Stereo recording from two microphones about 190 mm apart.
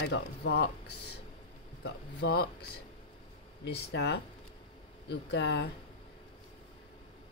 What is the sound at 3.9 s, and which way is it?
Speech, 65° left (ahead or behind).